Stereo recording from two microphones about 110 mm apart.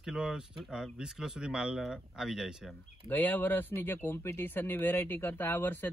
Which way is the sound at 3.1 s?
15° left (ahead or behind).